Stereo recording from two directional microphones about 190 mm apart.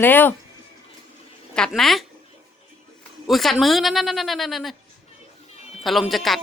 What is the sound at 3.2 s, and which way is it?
Speech, centre (ahead or behind).